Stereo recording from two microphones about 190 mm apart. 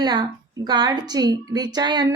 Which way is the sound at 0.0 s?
20° right (ahead or behind).